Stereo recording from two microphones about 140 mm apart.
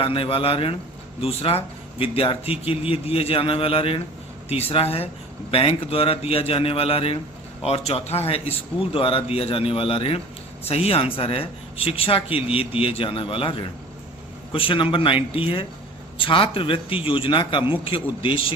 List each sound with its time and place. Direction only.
0.0 s a man's voice: 40° left (ahead or behind)